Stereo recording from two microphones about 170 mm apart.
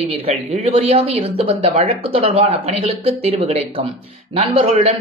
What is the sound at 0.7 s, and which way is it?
A man's voice, 35° right (ahead or behind).